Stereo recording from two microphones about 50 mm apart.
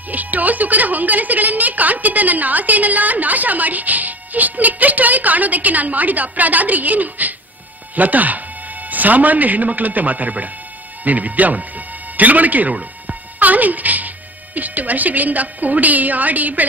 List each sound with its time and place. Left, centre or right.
0.1 s a woman's voice: right